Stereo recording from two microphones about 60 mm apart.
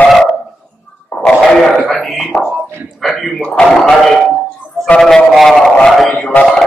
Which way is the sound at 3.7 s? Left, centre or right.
Centre.